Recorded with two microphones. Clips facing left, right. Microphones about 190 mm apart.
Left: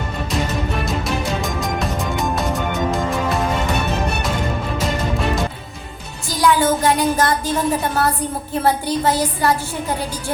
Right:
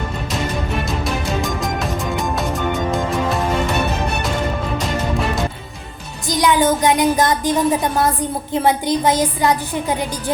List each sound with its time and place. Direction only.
1.0 s music: centre (ahead or behind)
6.2 s a woman's voice: 20° right (ahead or behind)